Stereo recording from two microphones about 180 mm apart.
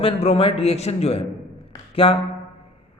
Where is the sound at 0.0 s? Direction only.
35° left (ahead or behind).